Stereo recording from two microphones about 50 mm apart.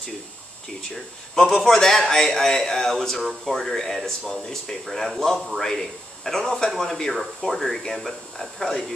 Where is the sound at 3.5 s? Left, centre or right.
Centre.